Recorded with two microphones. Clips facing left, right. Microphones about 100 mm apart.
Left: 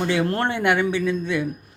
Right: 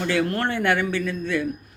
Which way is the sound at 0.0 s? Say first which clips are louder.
Left 1 dB; 20° left (ahead or behind).